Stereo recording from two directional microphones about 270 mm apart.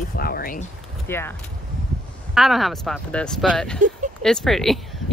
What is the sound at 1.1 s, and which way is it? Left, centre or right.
Speech, centre.